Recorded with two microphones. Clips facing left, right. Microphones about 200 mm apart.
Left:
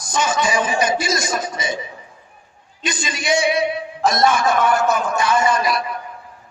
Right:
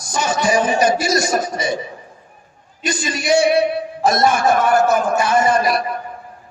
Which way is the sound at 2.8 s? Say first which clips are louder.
Right 3 dB; 55° right (ahead or behind).